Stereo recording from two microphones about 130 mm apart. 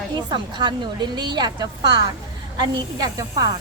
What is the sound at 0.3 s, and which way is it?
A woman's voice, 35° right (ahead or behind).